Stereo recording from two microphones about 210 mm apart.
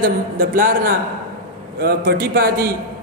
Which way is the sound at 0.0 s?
45° right (ahead or behind).